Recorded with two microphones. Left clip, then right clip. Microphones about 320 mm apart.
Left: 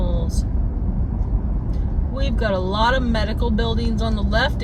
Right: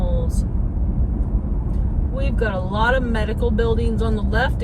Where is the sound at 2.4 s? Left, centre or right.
Centre.